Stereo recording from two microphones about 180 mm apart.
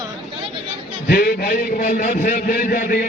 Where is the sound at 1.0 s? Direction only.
55° left (ahead or behind).